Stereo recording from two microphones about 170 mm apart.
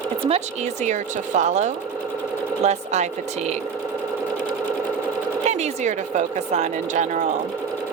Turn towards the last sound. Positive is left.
turn(degrees=-45)  # may be behind; listen again after turning